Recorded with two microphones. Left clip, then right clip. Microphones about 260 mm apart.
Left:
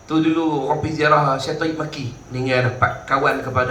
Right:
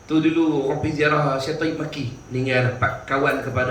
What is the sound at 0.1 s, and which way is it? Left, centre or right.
A man's voice, left.